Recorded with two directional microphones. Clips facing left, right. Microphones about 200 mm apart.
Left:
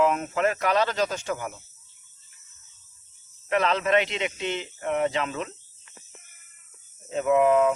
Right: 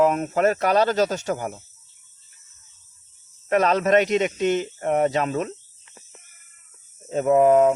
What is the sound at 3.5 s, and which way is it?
Speech, 45° right (ahead or behind).